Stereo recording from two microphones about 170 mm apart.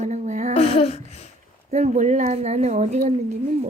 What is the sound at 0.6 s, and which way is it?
Speech, 40° left (ahead or behind).